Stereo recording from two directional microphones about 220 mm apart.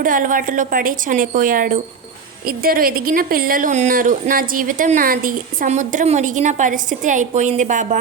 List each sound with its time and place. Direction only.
0.0 s speech: 40° right (ahead or behind)